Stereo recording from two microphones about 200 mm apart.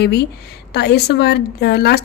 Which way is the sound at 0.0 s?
55° left (ahead or behind).